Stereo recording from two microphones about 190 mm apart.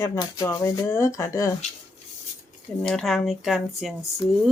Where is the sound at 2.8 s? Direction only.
Centre (ahead or behind).